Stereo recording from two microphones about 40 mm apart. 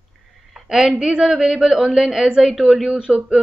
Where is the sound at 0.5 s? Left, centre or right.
Centre.